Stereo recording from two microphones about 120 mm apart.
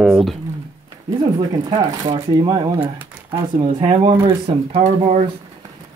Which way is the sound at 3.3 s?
45° right (ahead or behind).